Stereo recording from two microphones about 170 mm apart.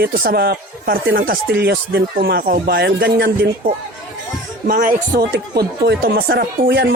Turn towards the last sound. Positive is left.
turn(degrees=-75)  # may be behind; listen again after turning